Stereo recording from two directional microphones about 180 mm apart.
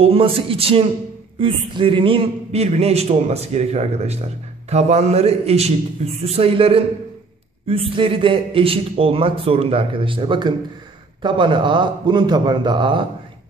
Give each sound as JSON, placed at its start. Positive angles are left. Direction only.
{"t": 0.0, "sound": "a man's voice", "side_deg": -30}